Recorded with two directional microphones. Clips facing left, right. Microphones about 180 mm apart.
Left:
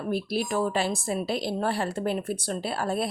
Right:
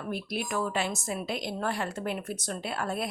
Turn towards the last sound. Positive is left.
turn(degrees=35)  # may be behind; listen again after turning